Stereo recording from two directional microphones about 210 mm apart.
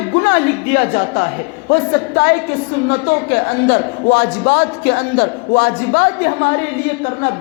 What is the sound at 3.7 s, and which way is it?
A woman's voice, 50° left (ahead or behind).